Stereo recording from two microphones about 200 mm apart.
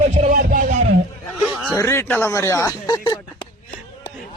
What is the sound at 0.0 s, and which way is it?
Music, 35° right (ahead or behind).